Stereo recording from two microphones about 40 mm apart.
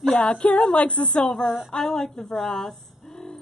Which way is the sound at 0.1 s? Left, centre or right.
Left.